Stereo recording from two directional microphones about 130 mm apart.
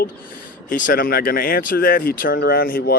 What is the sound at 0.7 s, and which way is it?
Speech, 90° left.